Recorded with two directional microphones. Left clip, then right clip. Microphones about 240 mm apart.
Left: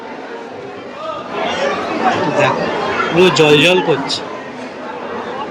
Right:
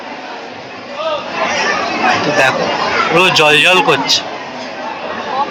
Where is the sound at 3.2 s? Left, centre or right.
Centre.